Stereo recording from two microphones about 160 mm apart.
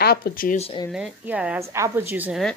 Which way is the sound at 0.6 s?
35° left (ahead or behind).